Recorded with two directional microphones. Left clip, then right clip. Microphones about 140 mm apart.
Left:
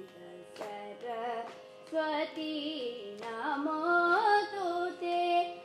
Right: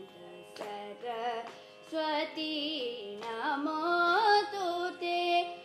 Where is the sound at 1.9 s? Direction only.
30° right (ahead or behind).